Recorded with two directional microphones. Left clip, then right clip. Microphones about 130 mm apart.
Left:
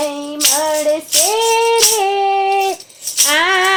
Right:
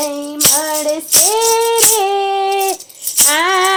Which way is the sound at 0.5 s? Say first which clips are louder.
Left 2 dB; 60° right (ahead or behind).